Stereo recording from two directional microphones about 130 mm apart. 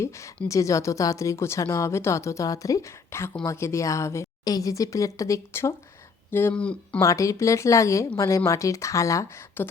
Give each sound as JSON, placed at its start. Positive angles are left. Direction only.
{"t": 0.4, "sound": "speech", "side_deg": 25}
{"t": 6.3, "sound": "speech", "side_deg": 15}
{"t": 7.0, "sound": "speech", "side_deg": 25}